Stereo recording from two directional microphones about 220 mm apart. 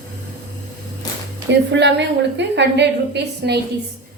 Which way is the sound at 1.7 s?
55° right (ahead or behind).